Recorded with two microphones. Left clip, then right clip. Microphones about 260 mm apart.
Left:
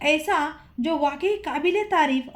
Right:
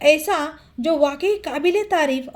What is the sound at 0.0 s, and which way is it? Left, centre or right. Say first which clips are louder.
A woman's voice: right 5 dB; right.